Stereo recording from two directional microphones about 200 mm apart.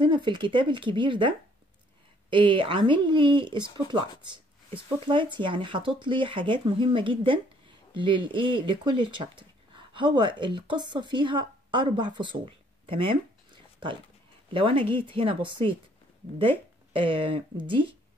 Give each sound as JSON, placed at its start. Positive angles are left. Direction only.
{"t": 0.0, "sound": "speech", "side_deg": -25}
{"t": 14.5, "sound": "speech", "side_deg": -25}